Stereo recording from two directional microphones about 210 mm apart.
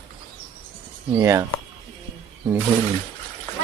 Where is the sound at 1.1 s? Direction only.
15° right (ahead or behind).